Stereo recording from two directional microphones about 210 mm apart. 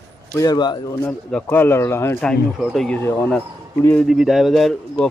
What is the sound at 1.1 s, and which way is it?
Speech, 10° left (ahead or behind).